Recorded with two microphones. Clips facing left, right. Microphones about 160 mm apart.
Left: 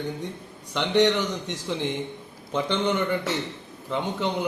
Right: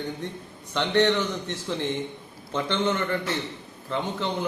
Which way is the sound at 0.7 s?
10° left (ahead or behind).